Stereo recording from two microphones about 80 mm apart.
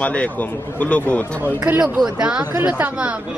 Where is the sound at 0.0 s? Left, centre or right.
Centre.